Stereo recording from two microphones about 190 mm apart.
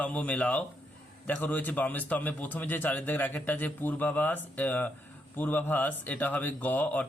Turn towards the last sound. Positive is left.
turn(degrees=10)  # may be behind; listen again after turning